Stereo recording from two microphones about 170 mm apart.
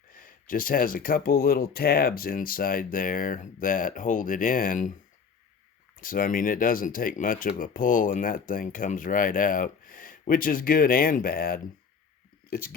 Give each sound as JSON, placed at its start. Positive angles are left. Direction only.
{"t": 0.1, "sound": "speech", "side_deg": 55}
{"t": 6.0, "sound": "speech", "side_deg": 55}